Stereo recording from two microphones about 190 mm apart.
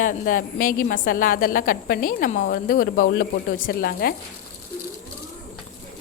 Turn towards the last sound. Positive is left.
turn(degrees=50)  # may be behind; listen again after turning